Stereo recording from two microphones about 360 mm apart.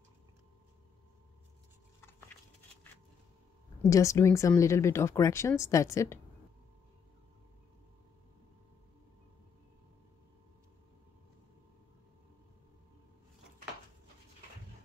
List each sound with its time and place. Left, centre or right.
3.9 s speech: centre